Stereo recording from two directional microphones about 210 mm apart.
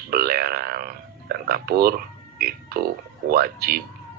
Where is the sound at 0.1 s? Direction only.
45° right (ahead or behind).